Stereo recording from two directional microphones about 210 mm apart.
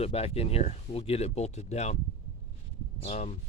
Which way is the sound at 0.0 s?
30° left (ahead or behind).